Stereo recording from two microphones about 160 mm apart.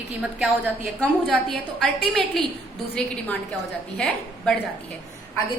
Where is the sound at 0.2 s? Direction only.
Centre (ahead or behind).